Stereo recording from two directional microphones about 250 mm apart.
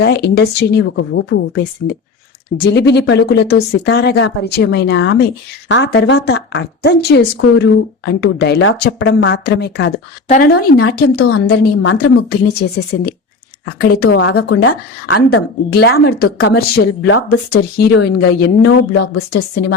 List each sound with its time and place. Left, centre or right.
0.0 s a woman's voice: left
14.0 s a woman's voice: left